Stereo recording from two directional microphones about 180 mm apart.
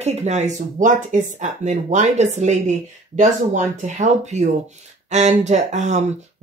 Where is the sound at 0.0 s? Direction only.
40° right (ahead or behind).